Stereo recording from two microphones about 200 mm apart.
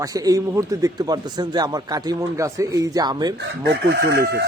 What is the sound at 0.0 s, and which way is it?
A man's voice, 15° right (ahead or behind).